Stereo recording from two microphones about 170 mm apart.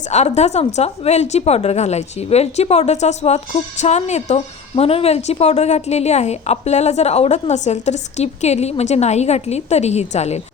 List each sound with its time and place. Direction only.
0.1 s a woman's voice: 40° left (ahead or behind)